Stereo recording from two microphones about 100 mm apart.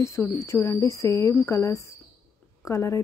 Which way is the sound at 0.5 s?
30° left (ahead or behind).